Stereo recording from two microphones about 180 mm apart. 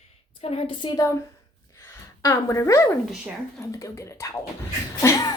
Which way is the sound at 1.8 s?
15° left (ahead or behind).